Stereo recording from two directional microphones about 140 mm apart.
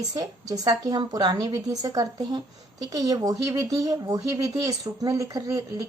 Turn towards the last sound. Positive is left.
turn(degrees=-25)  # may be behind; listen again after turning